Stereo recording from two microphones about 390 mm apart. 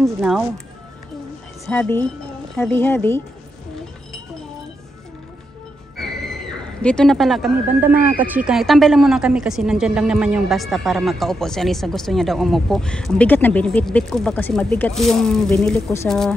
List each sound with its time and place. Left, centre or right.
0.0 s speech: centre
1.7 s speech: centre
5.9 s speech: centre